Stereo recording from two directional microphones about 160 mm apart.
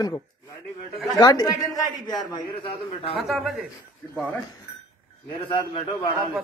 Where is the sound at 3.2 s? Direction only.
Centre (ahead or behind).